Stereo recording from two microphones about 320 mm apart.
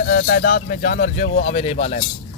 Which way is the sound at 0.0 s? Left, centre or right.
Left.